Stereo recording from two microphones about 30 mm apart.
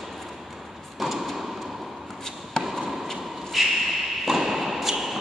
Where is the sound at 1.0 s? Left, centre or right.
Centre.